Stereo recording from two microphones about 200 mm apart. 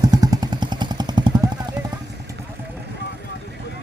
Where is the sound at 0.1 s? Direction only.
20° right (ahead or behind).